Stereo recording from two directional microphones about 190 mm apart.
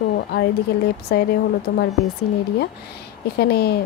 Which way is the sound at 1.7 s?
50° left (ahead or behind).